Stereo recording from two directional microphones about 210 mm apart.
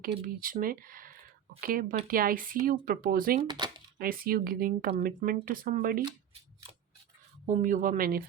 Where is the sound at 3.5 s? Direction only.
20° right (ahead or behind).